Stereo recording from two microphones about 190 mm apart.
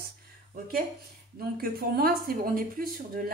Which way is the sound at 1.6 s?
50° right (ahead or behind).